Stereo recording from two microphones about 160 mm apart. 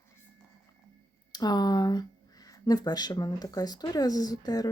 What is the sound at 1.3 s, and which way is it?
Speech, 25° left (ahead or behind).